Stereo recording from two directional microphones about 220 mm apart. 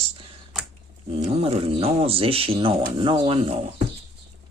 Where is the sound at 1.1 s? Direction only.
25° right (ahead or behind).